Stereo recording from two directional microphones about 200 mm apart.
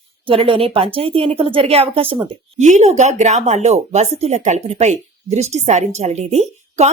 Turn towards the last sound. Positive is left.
turn(degrees=-35)  # may be behind; listen again after turning